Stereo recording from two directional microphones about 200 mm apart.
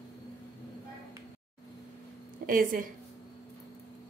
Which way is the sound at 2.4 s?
45° right (ahead or behind).